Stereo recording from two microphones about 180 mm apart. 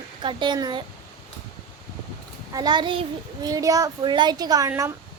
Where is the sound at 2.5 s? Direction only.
25° right (ahead or behind).